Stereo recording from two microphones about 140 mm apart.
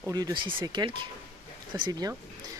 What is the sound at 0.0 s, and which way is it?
Speech, 25° right (ahead or behind).